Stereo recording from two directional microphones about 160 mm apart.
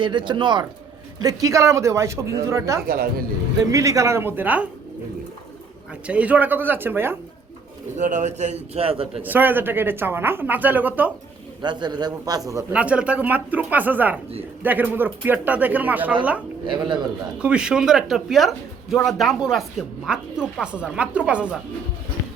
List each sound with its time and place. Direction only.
0.0 s speech: 30° right (ahead or behind)
2.8 s speech: 65° right (ahead or behind)
3.7 s speech: 20° right (ahead or behind)
6.1 s speech: 10° right (ahead or behind)
7.9 s speech: 50° right (ahead or behind)
9.2 s speech: 10° right (ahead or behind)
11.6 s speech: 25° right (ahead or behind)
12.7 s speech: 10° right (ahead or behind)
16.6 s speech: 30° right (ahead or behind)
17.4 s speech: 5° right (ahead or behind)